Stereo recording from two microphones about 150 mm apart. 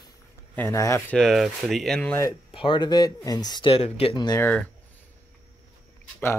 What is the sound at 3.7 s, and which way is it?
Speech, 40° left (ahead or behind).